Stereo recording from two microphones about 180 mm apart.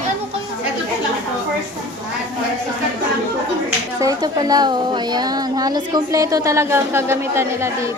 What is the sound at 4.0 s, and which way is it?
Speech, 20° right (ahead or behind).